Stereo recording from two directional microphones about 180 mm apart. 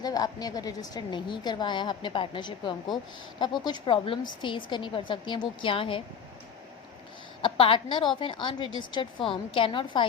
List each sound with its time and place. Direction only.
0.0 s a woman's voice: 20° left (ahead or behind)
7.4 s a woman's voice: 30° left (ahead or behind)